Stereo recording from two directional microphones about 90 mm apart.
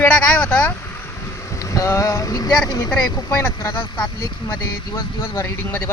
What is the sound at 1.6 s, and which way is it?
Boat, 35° left (ahead or behind).